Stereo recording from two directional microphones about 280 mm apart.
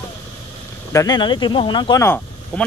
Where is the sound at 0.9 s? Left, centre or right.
Centre.